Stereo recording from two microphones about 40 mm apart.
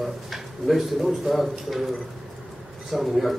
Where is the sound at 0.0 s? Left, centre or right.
Centre.